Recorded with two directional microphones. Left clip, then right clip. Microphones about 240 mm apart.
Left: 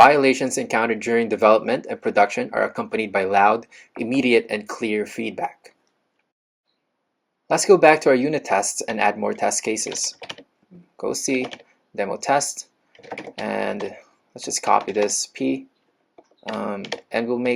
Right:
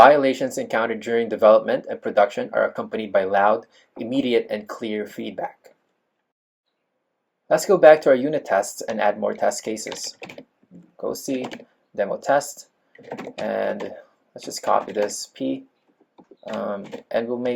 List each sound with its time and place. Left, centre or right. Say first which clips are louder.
0.0 s speech: even; left
7.4 s speech: right 1 dB; left
10.9 s speech: left 3 dB; left